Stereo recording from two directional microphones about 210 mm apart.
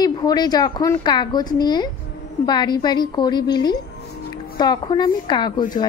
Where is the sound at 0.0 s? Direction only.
20° left (ahead or behind).